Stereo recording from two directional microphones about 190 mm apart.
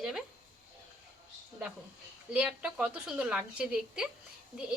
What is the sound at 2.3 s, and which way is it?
A woman's voice, 5° right (ahead or behind).